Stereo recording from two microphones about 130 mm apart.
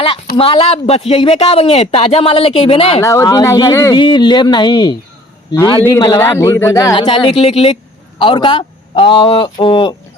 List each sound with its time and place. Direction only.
0.0 s speech: 45° left (ahead or behind)
3.0 s speech: 25° left (ahead or behind)
3.9 s a man's voice: 35° left (ahead or behind)
5.5 s a man's voice: 15° left (ahead or behind)
6.9 s a man's voice: 40° left (ahead or behind)